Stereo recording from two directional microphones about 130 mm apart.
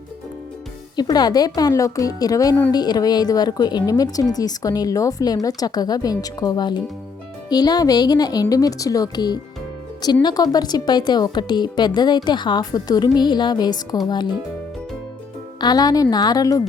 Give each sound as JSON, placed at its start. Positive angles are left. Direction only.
{"t": 0.9, "sound": "a woman's voice", "side_deg": 30}
{"t": 15.6, "sound": "speech", "side_deg": 30}